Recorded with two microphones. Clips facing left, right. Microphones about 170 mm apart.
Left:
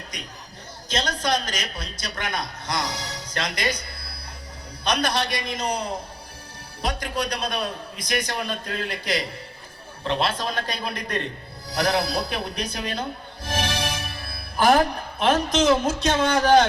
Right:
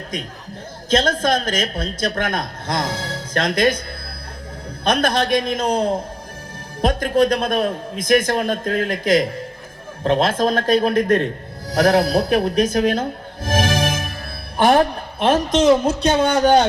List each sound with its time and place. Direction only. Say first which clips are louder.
0.9 s a woman's voice: right 7 dB; 50° right (ahead or behind)
14.7 s a woman's voice: right 2 dB; 30° right (ahead or behind)